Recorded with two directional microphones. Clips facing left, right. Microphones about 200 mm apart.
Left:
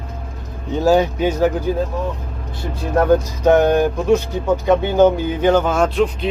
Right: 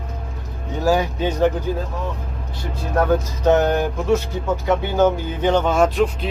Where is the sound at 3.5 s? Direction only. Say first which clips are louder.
Left 4 dB; 15° left (ahead or behind).